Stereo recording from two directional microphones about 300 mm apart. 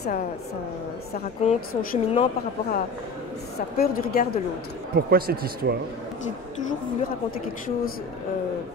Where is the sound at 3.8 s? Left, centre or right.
Left.